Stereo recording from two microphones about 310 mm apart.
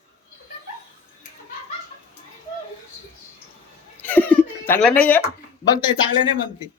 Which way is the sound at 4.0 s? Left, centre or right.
Centre.